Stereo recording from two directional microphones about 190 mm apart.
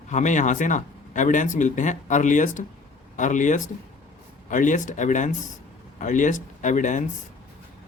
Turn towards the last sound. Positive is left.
turn(degrees=40)  # may be behind; listen again after turning